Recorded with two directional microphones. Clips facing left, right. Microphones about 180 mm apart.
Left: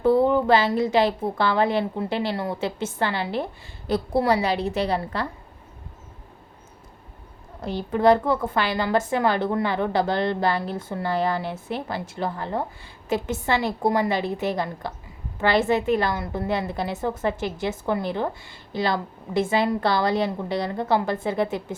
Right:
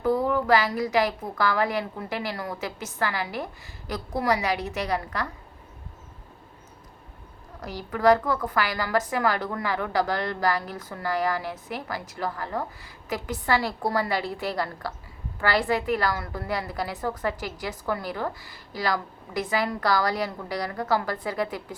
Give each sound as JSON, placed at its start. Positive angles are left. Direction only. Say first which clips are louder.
{"t": 0.0, "sound": "a woman's voice", "louder": "left 5 dB", "side_deg": 25}
{"t": 7.6, "sound": "a woman's voice", "louder": "left 3 dB", "side_deg": 25}